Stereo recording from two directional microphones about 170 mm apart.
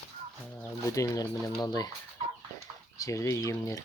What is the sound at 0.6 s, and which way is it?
Speech, 15° left (ahead or behind).